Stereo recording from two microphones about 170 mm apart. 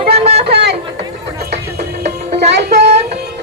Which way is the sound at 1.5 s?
75° right (ahead or behind).